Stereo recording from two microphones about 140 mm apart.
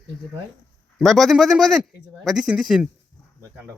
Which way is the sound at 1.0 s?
Centre (ahead or behind).